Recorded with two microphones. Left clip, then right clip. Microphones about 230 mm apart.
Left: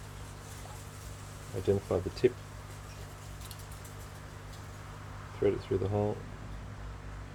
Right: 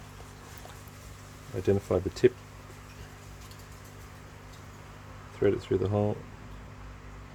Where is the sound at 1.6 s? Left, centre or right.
Right.